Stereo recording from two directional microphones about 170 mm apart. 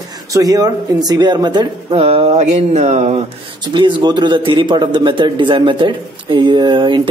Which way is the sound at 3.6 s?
30° right (ahead or behind).